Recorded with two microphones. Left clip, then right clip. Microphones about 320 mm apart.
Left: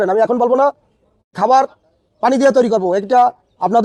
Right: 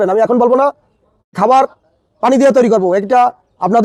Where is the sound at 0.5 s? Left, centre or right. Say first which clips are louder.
Right 2 dB; left.